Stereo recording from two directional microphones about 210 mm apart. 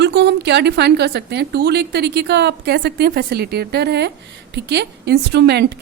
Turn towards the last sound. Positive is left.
turn(degrees=-50)  # may be behind; listen again after turning